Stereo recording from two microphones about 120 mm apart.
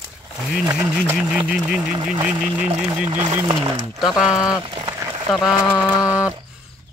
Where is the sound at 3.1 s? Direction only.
35° right (ahead or behind).